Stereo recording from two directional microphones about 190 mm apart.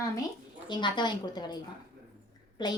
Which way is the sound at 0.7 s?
25° left (ahead or behind).